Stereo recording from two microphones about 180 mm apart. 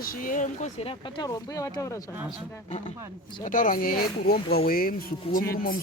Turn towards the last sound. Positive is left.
turn(degrees=50)  # may be behind; listen again after turning